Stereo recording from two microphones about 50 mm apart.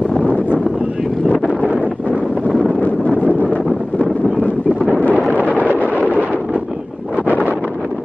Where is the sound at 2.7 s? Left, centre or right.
Left.